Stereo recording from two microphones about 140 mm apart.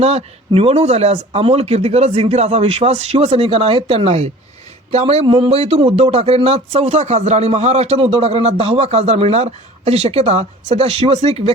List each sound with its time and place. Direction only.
0.0 s speech: 50° right (ahead or behind)
5.2 s speech: 40° right (ahead or behind)